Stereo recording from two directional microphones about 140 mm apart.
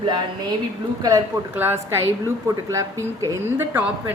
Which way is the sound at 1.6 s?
15° right (ahead or behind).